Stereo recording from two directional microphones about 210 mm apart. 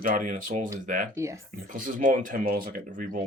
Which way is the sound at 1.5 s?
40° right (ahead or behind).